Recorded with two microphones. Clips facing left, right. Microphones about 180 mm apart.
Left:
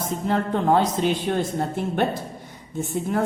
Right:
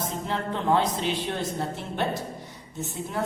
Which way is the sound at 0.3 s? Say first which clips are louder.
Left 5 dB; 45° left (ahead or behind).